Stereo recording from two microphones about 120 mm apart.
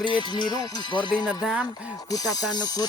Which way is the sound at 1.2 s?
5° right (ahead or behind).